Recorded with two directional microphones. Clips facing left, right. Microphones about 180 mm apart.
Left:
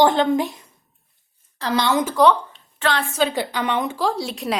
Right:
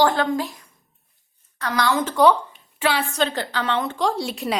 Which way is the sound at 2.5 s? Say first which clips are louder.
Even; 10° right (ahead or behind).